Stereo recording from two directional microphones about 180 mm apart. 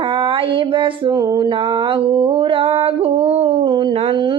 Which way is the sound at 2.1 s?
30° right (ahead or behind).